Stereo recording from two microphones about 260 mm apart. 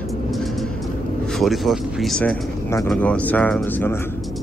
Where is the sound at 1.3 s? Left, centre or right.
Centre.